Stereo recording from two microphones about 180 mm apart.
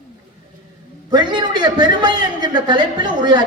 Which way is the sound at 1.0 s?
25° right (ahead or behind).